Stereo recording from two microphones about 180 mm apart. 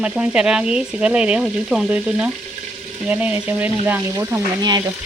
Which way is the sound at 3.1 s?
10° right (ahead or behind).